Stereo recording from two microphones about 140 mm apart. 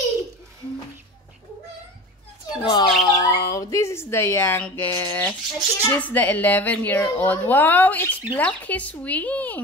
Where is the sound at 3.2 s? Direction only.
25° left (ahead or behind).